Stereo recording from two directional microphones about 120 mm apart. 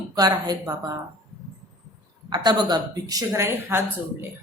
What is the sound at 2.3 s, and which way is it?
A woman's voice, 35° right (ahead or behind).